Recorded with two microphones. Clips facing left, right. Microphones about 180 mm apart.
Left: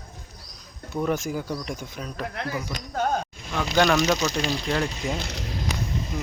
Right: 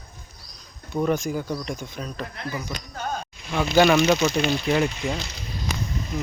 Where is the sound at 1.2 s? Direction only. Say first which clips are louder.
Right 2 dB; 5° left (ahead or behind).